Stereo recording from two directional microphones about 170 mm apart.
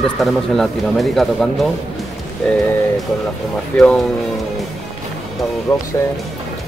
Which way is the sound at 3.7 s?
5° left (ahead or behind).